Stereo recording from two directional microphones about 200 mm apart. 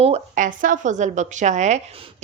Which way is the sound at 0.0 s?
35° right (ahead or behind).